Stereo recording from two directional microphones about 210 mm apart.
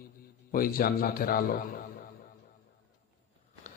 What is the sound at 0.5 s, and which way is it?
A man's voice, 45° left (ahead or behind).